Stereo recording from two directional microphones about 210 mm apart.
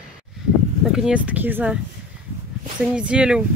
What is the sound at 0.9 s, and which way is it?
Speech, 5° right (ahead or behind).